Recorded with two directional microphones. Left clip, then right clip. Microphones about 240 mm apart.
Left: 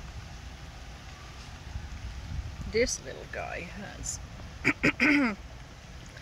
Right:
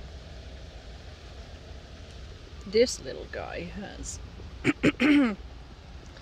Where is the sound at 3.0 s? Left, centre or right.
Right.